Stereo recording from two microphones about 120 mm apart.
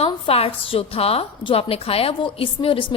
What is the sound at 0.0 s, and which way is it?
A woman's voice, 55° left (ahead or behind).